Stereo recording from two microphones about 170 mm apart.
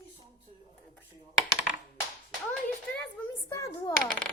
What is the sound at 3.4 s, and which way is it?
Speech, 15° left (ahead or behind).